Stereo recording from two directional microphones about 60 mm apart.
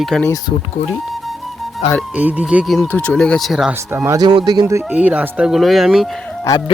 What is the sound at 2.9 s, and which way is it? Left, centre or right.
Speech, left.